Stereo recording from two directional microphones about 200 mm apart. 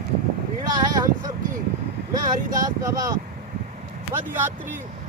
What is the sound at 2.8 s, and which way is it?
Speech, 15° right (ahead or behind).